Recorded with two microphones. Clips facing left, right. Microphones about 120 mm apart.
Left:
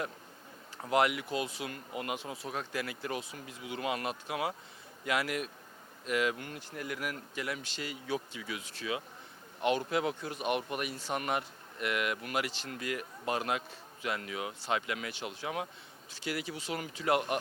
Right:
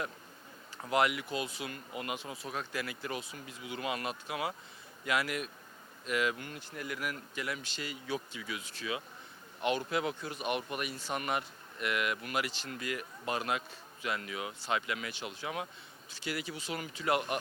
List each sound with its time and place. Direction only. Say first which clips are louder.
0.9 s a man's voice: left 1 dB; 50° left (ahead or behind)
10.7 s a man's voice: left 2 dB; 50° left (ahead or behind)